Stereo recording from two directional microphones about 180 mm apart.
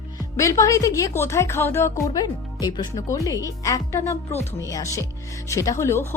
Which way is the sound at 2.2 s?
25° left (ahead or behind).